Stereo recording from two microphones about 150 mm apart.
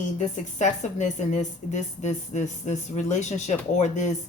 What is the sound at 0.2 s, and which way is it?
A woman's voice, 50° left (ahead or behind).